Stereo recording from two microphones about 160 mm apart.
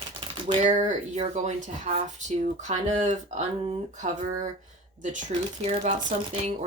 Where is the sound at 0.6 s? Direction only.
50° right (ahead or behind).